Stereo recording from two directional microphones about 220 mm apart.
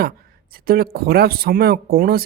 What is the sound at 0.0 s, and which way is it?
Speech, 40° right (ahead or behind).